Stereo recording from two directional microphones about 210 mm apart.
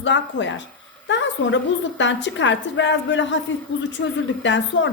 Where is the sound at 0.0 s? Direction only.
60° left (ahead or behind).